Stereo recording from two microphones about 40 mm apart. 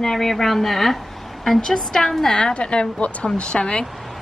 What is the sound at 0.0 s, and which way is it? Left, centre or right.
A woman's voice, centre.